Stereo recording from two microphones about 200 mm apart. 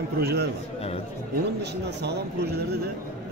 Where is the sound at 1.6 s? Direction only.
55° right (ahead or behind).